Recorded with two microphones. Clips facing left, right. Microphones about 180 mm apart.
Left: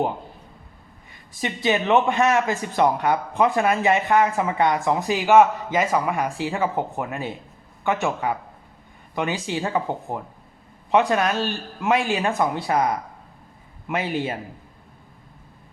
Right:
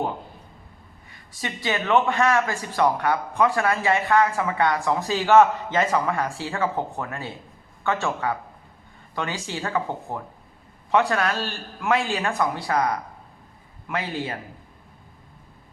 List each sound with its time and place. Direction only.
1.4 s speech: 20° left (ahead or behind)